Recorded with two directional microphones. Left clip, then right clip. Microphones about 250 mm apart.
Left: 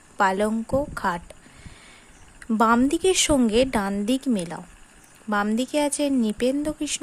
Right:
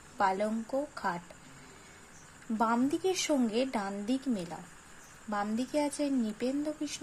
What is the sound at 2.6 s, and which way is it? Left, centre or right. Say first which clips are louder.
A woman's voice: left 10 dB; left.